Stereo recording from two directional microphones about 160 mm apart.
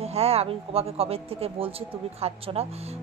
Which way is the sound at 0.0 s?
40° right (ahead or behind).